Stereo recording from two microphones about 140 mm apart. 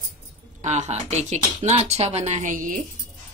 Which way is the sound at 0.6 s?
55° right (ahead or behind).